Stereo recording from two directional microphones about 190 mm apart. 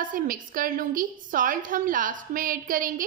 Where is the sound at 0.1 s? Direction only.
45° right (ahead or behind).